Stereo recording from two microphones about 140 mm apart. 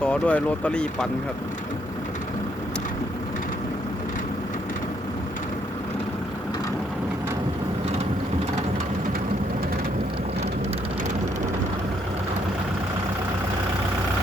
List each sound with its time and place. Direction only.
0.0 s speech: 10° left (ahead or behind)